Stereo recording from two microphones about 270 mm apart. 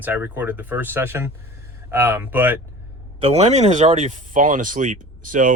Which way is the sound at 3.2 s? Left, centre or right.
Right.